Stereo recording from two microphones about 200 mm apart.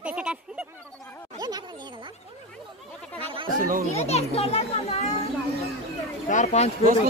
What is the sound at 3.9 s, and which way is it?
A child's voice, 30° left (ahead or behind).